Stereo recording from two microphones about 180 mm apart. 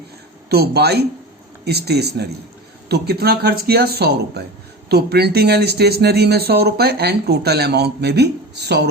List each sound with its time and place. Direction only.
0.5 s speech: 60° right (ahead or behind)